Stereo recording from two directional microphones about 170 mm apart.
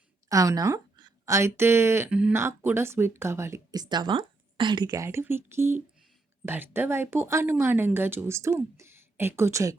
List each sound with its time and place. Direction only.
0.3 s a woman's voice: 20° right (ahead or behind)